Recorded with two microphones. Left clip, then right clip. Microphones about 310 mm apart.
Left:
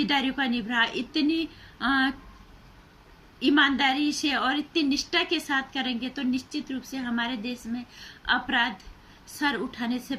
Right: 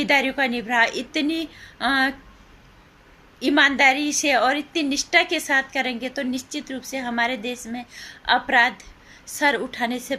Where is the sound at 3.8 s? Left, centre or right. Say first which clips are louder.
Right 7 dB; centre.